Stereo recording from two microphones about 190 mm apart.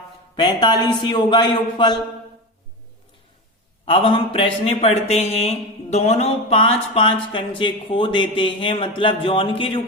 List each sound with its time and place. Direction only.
0.3 s speech: 25° left (ahead or behind)
3.8 s speech: 25° left (ahead or behind)